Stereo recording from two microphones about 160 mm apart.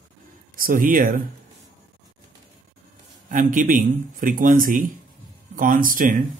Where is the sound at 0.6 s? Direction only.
60° right (ahead or behind).